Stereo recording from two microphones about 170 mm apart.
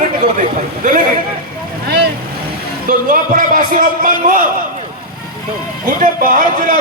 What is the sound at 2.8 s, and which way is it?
A man's voice, 55° right (ahead or behind).